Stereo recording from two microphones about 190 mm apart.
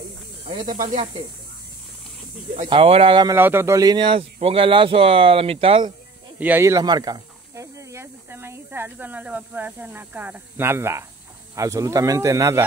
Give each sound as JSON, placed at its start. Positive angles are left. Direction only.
{"t": 0.5, "sound": "speech", "side_deg": -25}
{"t": 0.7, "sound": "speech", "side_deg": -35}
{"t": 2.5, "sound": "speech", "side_deg": -30}
{"t": 3.3, "sound": "speech", "side_deg": -10}
{"t": 6.4, "sound": "speech", "side_deg": -10}